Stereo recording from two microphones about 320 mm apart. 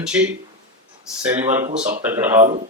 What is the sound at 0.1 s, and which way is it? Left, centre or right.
Speech, centre.